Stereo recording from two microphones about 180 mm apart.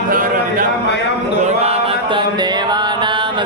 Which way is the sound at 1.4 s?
35° right (ahead or behind).